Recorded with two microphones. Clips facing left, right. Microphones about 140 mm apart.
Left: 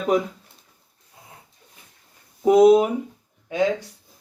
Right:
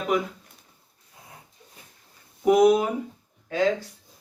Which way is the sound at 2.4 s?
25° left (ahead or behind).